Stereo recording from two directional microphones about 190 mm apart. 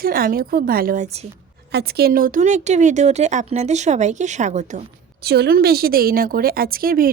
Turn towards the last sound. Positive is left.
turn(degrees=-50)  # may be behind; listen again after turning